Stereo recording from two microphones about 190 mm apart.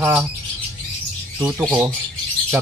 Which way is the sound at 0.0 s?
10° right (ahead or behind).